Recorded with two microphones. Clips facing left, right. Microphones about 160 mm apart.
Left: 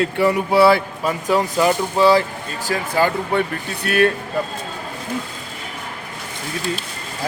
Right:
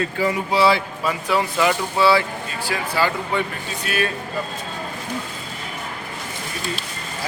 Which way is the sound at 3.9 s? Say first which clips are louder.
Left 8 dB; 60° left (ahead or behind).